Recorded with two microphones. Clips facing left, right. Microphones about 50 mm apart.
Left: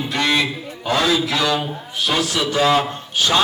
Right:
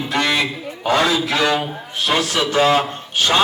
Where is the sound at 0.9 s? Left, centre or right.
Right.